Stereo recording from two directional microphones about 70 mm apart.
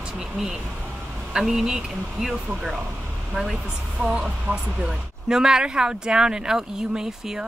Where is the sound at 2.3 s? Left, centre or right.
Right.